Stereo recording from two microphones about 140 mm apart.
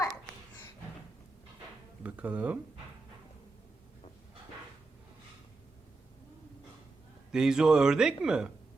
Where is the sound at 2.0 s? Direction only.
10° right (ahead or behind).